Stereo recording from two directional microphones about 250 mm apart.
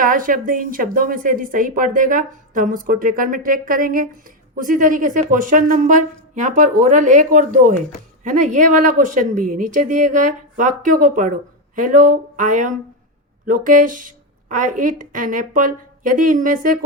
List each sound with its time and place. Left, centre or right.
0.0 s speech: right